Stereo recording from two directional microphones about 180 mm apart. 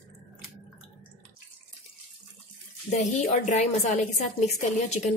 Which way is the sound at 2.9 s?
40° left (ahead or behind).